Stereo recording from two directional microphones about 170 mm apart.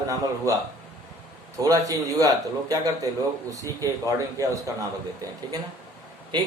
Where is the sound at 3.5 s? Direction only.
20° right (ahead or behind).